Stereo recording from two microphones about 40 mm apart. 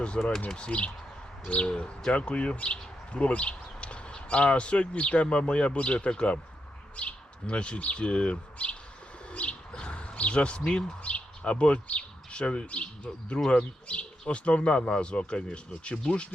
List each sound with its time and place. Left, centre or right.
0.4 s speech: left